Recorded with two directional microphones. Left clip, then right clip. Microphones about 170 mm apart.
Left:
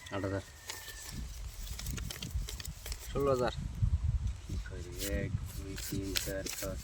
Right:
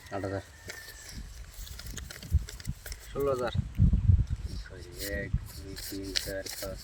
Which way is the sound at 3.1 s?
30° left (ahead or behind).